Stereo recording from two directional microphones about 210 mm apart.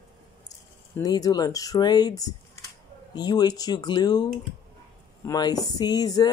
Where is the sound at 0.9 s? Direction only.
15° left (ahead or behind).